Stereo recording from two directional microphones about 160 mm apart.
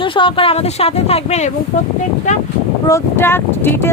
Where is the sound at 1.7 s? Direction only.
55° left (ahead or behind).